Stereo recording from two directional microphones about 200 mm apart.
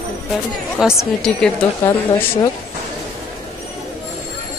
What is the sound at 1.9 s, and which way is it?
Speech, 20° left (ahead or behind).